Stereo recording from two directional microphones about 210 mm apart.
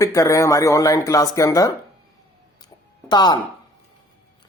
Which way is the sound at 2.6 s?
20° left (ahead or behind).